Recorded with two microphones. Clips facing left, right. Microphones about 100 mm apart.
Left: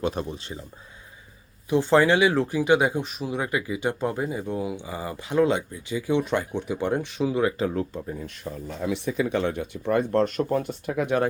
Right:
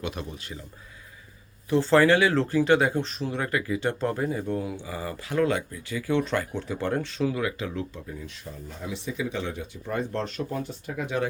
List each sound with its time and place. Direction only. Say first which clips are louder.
0.0 s speech: left 6 dB; 35° left (ahead or behind)
1.7 s speech: even; 15° left (ahead or behind)
7.3 s speech: left 6 dB; 35° left (ahead or behind); by 11.3 s 55° left (ahead or behind)